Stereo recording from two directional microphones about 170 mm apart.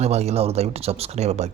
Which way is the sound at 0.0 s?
40° right (ahead or behind).